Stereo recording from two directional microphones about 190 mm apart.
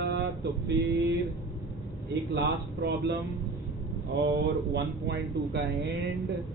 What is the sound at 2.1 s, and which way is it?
A man's voice, 65° right (ahead or behind).